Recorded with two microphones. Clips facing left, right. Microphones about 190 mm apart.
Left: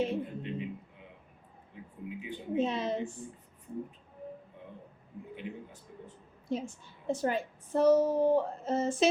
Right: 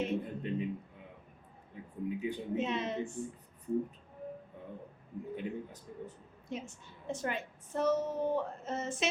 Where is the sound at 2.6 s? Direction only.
35° left (ahead or behind).